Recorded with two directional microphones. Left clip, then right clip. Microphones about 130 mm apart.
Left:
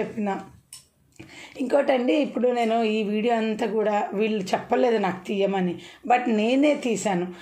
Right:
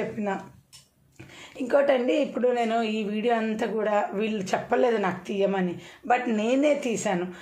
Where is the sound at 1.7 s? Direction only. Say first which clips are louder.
Left 1 dB; 25° left (ahead or behind).